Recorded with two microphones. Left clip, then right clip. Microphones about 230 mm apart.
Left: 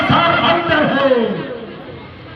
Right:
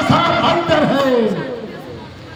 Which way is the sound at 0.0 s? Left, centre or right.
Right.